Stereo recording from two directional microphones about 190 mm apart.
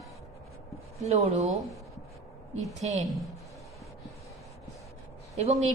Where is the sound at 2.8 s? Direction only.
35° right (ahead or behind).